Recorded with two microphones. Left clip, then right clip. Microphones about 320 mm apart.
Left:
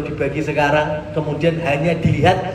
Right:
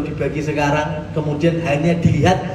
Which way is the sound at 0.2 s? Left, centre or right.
Centre.